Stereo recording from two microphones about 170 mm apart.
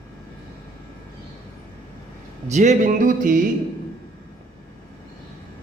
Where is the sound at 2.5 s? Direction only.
45° right (ahead or behind).